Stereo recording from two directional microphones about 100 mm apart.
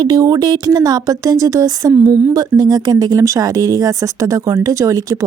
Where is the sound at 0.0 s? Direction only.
40° right (ahead or behind).